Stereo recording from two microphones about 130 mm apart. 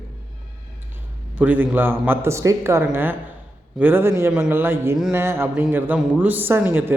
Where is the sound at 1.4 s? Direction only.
15° right (ahead or behind).